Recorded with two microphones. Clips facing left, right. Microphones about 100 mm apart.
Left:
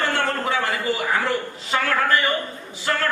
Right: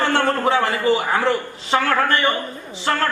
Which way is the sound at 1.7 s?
40° right (ahead or behind).